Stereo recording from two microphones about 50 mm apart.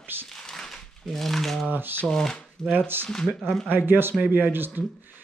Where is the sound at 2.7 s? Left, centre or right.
Right.